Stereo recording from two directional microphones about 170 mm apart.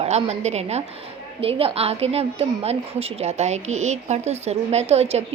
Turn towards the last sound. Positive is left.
turn(degrees=-35)  # may be behind; listen again after turning